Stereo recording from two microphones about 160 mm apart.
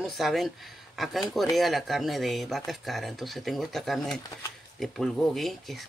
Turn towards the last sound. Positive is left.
turn(degrees=0)  # may be behind; listen again after turning